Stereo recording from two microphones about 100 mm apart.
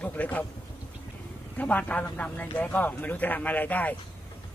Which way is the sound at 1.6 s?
15° left (ahead or behind).